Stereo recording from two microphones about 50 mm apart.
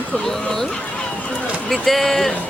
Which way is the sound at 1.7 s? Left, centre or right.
Centre.